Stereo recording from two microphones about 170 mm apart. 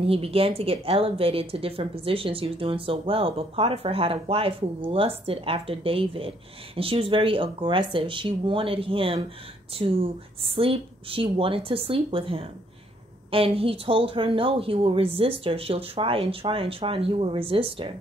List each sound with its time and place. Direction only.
0.0 s speech: 35° right (ahead or behind)